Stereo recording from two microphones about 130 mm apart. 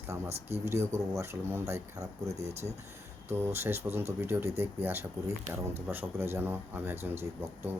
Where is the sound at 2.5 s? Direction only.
55° right (ahead or behind).